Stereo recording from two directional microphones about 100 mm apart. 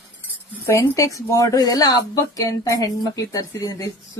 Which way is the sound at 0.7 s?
30° left (ahead or behind).